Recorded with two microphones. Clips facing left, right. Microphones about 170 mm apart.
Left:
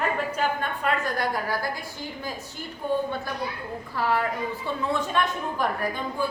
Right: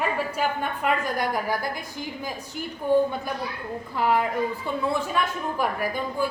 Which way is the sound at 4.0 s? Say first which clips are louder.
Right 3 dB; 15° right (ahead or behind).